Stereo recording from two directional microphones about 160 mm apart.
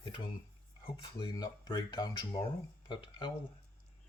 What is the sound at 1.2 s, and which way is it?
Speech, 25° left (ahead or behind).